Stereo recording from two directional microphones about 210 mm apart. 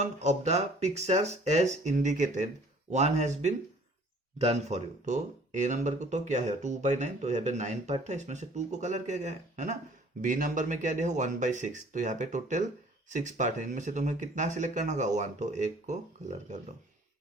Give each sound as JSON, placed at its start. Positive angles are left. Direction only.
{"t": 0.0, "sound": "speech", "side_deg": -30}